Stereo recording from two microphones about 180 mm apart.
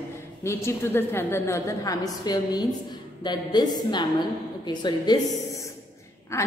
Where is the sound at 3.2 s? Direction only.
25° left (ahead or behind).